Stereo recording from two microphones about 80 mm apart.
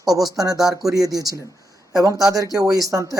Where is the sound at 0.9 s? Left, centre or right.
Right.